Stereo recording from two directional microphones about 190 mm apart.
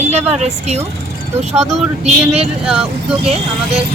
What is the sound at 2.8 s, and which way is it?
Speech, 35° right (ahead or behind).